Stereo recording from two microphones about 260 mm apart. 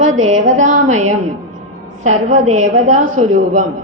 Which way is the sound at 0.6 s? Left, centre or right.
Right.